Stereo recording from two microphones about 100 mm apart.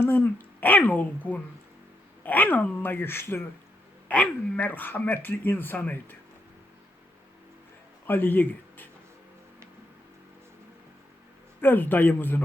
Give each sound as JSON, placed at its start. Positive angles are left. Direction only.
{"t": 0.0, "sound": "speech", "side_deg": 20}
{"t": 8.0, "sound": "speech", "side_deg": 20}
{"t": 11.6, "sound": "speech", "side_deg": 20}